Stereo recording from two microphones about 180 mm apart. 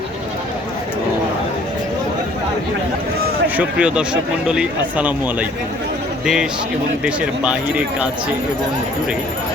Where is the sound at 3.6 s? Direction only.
5° right (ahead or behind).